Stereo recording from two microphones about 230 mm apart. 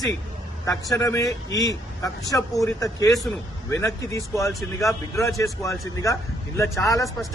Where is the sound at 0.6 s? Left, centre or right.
Centre.